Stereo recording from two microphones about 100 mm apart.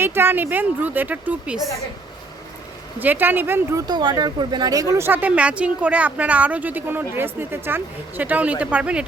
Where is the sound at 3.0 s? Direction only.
20° right (ahead or behind).